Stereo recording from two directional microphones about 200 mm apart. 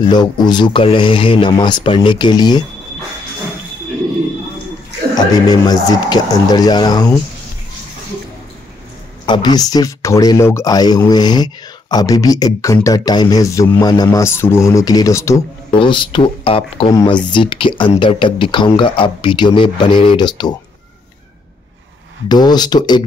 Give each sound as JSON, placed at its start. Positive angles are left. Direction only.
{"t": 0.1, "sound": "speech", "side_deg": 20}
{"t": 5.1, "sound": "speech", "side_deg": 20}
{"t": 9.2, "sound": "speech", "side_deg": 20}
{"t": 22.3, "sound": "speech", "side_deg": 20}